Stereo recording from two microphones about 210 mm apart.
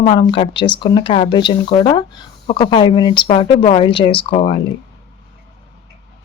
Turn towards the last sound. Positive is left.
turn(degrees=25)  # may be behind; listen again after turning